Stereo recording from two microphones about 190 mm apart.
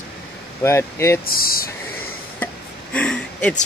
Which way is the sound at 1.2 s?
50° left (ahead or behind).